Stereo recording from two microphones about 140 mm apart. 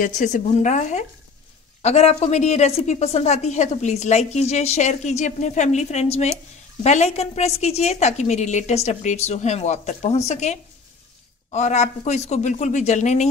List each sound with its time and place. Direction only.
0.0 s a man's voice: 60° left (ahead or behind)